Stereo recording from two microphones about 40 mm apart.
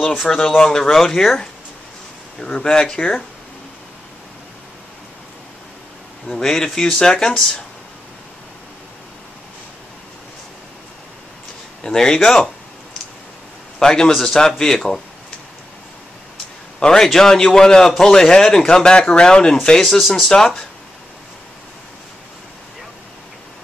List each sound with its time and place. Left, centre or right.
0.2 s a man's voice: centre
6.3 s a man's voice: centre
11.8 s a man's voice: centre
13.7 s a man's voice: centre
16.8 s a man's voice: centre
19.8 s a man's voice: centre